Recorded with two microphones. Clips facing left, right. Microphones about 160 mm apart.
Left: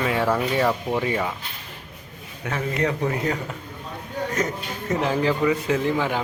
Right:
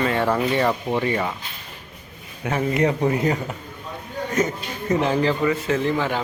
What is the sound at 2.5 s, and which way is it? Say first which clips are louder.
Speech: right 4 dB; 20° right (ahead or behind).